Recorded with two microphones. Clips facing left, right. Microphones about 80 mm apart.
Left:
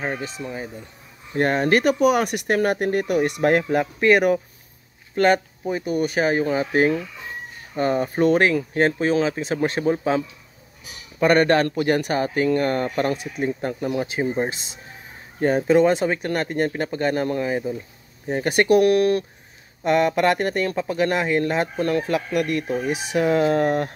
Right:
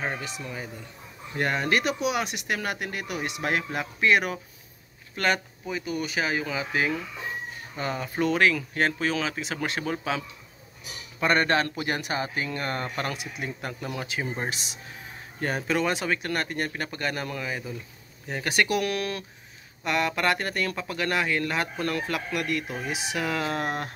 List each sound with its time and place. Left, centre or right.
0.0 s speech: left
11.1 s speech: left
19.8 s speech: left